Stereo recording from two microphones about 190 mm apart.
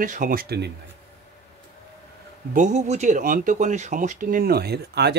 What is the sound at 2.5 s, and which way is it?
Speech, 40° right (ahead or behind).